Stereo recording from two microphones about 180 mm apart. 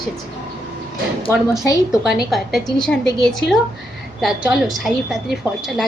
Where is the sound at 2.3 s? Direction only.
Centre (ahead or behind).